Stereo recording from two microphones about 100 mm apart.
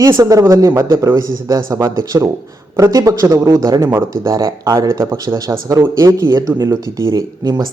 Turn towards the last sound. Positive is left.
turn(degrees=-40)  # may be behind; listen again after turning